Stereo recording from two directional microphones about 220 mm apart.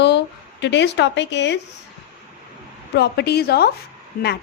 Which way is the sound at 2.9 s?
50° left (ahead or behind).